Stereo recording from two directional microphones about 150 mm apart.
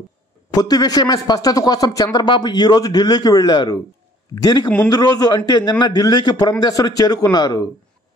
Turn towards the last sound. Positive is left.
turn(degrees=25)  # may be behind; listen again after turning